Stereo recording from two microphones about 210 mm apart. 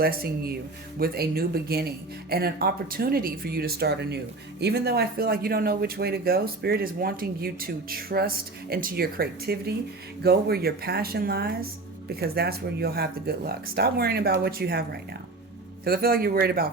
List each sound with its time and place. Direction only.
0.0 s speech: 45° right (ahead or behind)